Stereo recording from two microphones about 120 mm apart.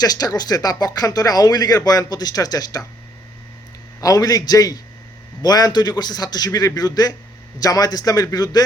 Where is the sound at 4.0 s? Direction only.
30° left (ahead or behind).